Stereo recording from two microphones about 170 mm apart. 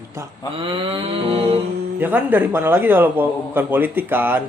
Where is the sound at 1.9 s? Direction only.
10° right (ahead or behind).